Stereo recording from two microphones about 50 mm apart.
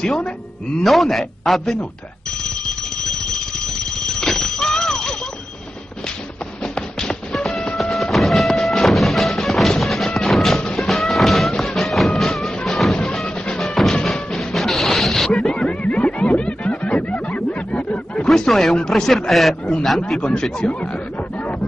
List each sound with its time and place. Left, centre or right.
0.8 s speech: centre
4.1 s a sound: centre
6.6 s music: centre
15.3 s a sound: centre
18.2 s a man's voice: centre
20.1 s a man's voice: centre